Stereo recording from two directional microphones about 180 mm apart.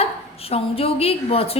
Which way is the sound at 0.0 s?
35° left (ahead or behind).